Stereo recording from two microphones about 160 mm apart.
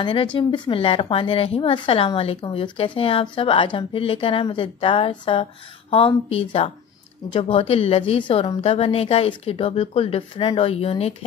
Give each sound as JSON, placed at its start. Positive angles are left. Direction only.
{"t": 0.0, "sound": "speech", "side_deg": 30}